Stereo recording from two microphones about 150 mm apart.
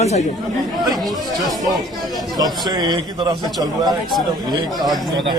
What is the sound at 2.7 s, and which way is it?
Speech, 30° right (ahead or behind).